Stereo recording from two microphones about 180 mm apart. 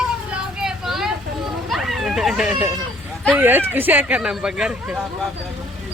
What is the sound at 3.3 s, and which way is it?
Speech, 10° right (ahead or behind).